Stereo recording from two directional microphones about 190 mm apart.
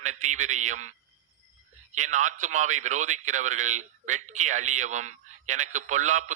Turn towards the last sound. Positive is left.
turn(degrees=-40)  # may be behind; listen again after turning